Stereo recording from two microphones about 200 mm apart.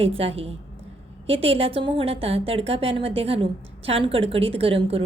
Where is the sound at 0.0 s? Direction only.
30° right (ahead or behind).